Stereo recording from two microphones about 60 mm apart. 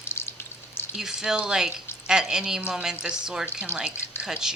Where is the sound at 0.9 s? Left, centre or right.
Centre.